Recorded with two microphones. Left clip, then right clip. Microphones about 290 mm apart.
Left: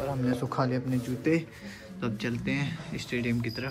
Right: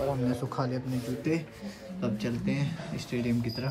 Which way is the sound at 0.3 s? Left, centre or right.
Centre.